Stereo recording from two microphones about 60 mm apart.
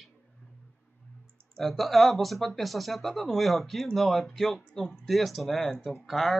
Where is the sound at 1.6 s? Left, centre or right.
Centre.